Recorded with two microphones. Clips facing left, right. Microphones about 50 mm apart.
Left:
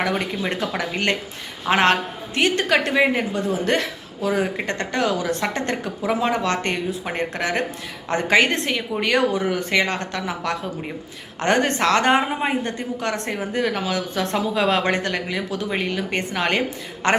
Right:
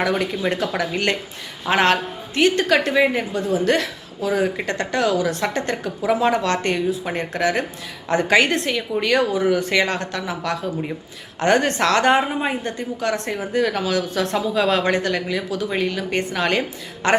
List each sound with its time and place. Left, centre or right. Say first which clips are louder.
0.8 s a woman's voice: right 1 dB; left
6.3 s speech: right 2 dB; left
7.2 s a woman's voice: even; left
9.4 s a woman's voice: right 2 dB; left
13.5 s a woman's voice: right 3 dB; left